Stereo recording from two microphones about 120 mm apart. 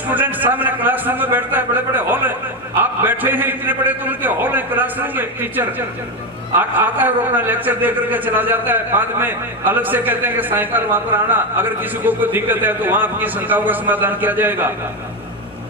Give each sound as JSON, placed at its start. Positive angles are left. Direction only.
{"t": 0.1, "sound": "a man's voice", "side_deg": -15}